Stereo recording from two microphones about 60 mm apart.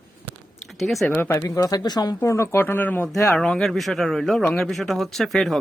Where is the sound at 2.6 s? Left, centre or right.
Left.